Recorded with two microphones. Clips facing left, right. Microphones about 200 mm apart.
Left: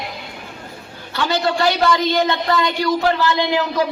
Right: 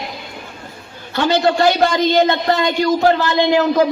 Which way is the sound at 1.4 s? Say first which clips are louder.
Right 1 dB; 45° right (ahead or behind).